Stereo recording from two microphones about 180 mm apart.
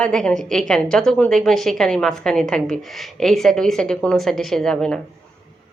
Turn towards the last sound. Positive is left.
turn(degrees=5)  # may be behind; listen again after turning